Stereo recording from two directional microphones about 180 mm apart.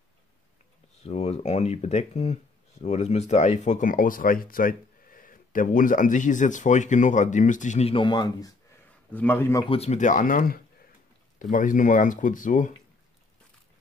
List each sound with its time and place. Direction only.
1.0 s speech: 35° left (ahead or behind)
9.1 s a man's voice: 10° left (ahead or behind)
9.7 s speech: 35° left (ahead or behind)